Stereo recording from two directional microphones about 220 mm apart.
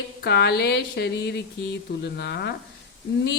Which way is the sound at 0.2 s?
50° left (ahead or behind).